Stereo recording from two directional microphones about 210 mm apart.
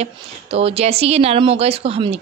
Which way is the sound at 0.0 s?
30° right (ahead or behind).